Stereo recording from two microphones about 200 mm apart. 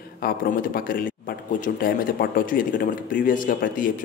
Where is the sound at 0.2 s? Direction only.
45° left (ahead or behind).